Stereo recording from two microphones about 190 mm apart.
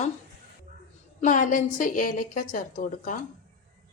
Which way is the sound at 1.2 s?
40° left (ahead or behind).